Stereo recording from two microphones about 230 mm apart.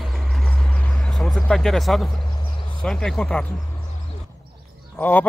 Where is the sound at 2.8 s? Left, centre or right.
Centre.